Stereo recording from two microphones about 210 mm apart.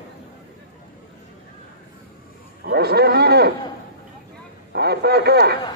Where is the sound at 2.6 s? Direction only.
50° right (ahead or behind).